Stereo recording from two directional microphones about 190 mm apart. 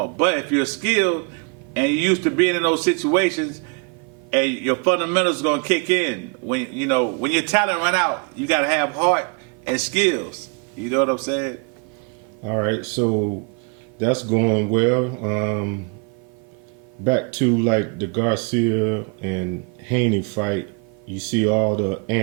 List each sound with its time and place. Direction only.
0.2 s a man's voice: 10° right (ahead or behind)
17.1 s a man's voice: 15° right (ahead or behind)